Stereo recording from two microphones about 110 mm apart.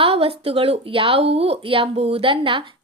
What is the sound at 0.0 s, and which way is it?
A woman's voice, 60° right (ahead or behind).